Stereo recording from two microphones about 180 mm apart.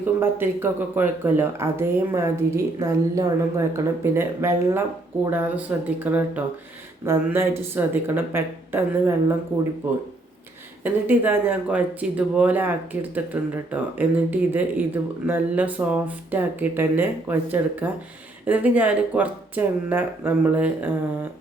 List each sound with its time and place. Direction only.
0.0 s speech: 10° right (ahead or behind)